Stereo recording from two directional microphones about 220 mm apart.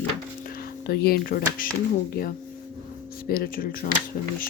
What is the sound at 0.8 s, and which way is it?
Speech, 45° left (ahead or behind).